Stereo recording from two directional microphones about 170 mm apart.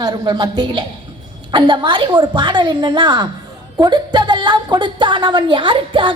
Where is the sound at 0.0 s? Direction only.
25° right (ahead or behind).